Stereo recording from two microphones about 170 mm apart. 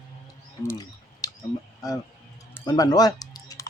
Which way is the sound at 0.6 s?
20° left (ahead or behind).